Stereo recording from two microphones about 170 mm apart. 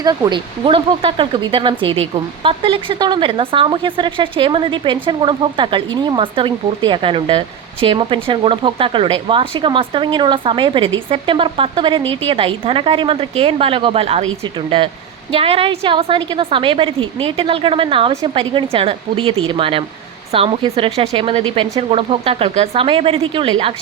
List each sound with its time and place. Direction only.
0.0 s speech: 25° right (ahead or behind)
15.3 s a woman's voice: 35° right (ahead or behind)